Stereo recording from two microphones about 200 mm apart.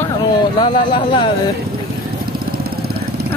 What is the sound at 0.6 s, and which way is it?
Speech, 25° left (ahead or behind).